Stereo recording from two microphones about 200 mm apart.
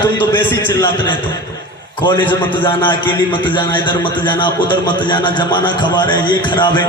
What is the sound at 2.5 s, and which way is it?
A man's voice, 25° left (ahead or behind).